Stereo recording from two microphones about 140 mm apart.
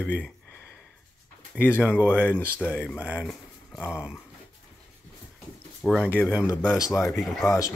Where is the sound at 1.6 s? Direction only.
15° left (ahead or behind).